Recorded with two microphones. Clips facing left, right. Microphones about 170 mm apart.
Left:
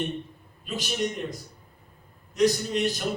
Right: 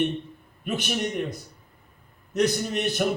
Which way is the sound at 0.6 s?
60° right (ahead or behind).